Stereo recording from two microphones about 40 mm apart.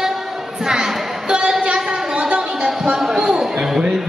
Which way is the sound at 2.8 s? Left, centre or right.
Centre.